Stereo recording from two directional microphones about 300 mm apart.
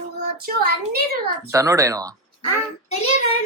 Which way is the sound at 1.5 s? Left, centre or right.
Centre.